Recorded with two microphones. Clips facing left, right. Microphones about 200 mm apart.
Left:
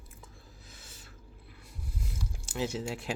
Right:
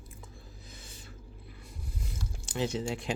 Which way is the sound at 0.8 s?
5° left (ahead or behind).